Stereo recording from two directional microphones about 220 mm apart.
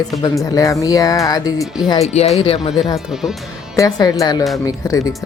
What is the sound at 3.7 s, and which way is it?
Speech, 15° left (ahead or behind).